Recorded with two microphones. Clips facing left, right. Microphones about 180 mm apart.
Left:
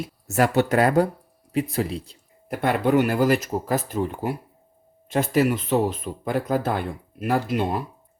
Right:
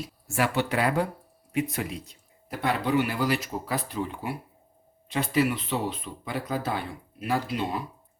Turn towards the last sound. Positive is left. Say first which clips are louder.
# left 5 dB
turn(degrees=50)  # may be behind; listen again after turning